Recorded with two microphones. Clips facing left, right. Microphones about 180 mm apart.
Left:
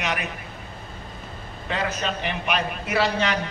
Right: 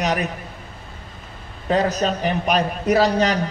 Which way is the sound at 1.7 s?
40° right (ahead or behind).